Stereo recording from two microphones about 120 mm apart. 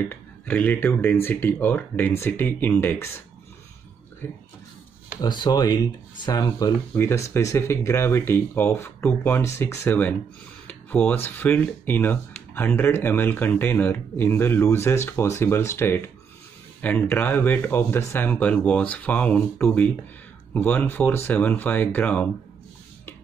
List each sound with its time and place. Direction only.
0.1 s speech: 15° left (ahead or behind)
5.2 s speech: 35° left (ahead or behind); by 10.1 s 15° left (ahead or behind)
10.7 s a sound: 15° left (ahead or behind)
11.2 s speech: 15° left (ahead or behind)